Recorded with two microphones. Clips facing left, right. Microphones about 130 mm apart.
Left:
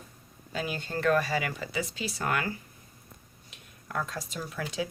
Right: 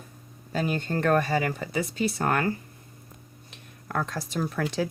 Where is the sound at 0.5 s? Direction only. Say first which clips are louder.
Right 6 dB; 45° right (ahead or behind).